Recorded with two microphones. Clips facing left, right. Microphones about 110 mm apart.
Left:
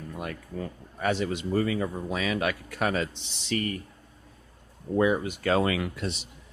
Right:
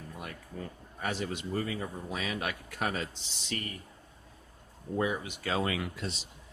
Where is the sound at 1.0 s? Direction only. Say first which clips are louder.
Left 7 dB; 90° left.